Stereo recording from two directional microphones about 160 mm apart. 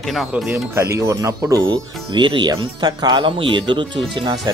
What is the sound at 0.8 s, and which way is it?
Speech, 15° right (ahead or behind).